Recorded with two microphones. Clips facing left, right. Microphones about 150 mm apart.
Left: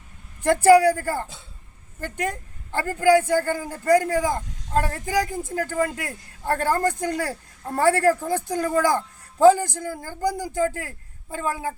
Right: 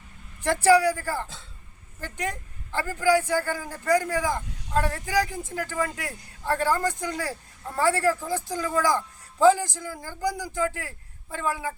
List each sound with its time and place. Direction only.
0.4 s a man's voice: 50° left (ahead or behind)